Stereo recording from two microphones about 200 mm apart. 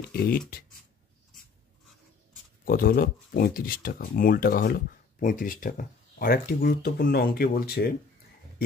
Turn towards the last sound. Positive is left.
turn(degrees=50)  # may be behind; listen again after turning